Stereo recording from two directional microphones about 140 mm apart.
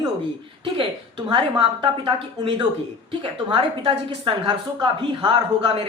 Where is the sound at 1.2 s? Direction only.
35° right (ahead or behind).